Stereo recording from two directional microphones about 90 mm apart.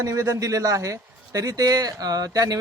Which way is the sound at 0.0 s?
35° right (ahead or behind).